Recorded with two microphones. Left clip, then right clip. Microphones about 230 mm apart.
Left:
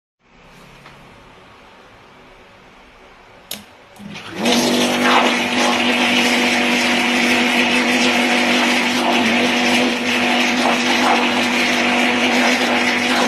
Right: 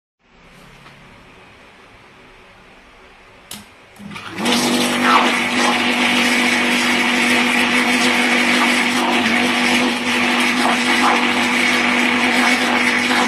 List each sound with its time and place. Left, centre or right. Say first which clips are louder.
4.4 s vehicle: left 1 dB; centre
6.5 s a sound: even; centre
8.3 s vehicle: right 1 dB; centre
10.2 s blender: even; centre